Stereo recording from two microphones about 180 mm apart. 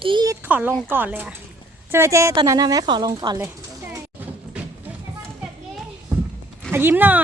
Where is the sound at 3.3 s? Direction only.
10° right (ahead or behind).